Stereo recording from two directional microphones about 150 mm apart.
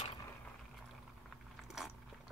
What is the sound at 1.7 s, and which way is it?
Biting, centre (ahead or behind).